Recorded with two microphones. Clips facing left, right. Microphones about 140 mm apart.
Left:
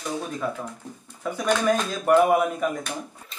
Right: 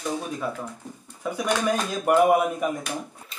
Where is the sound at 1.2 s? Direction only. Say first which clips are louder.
Left 2 dB; 10° right (ahead or behind).